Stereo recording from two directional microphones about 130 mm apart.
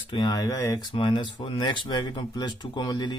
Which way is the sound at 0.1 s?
30° left (ahead or behind).